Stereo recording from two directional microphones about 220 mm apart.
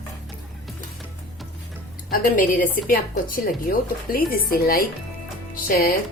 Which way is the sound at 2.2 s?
35° left (ahead or behind).